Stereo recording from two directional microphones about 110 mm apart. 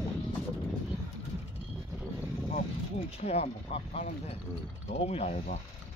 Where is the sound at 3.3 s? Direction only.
70° left (ahead or behind).